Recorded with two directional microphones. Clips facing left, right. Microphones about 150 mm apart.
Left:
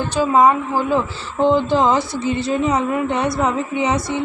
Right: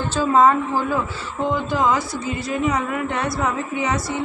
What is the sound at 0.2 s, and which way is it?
Speech, 15° left (ahead or behind).